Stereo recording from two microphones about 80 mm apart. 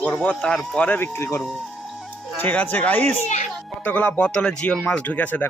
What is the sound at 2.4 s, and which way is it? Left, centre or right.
Speech, left.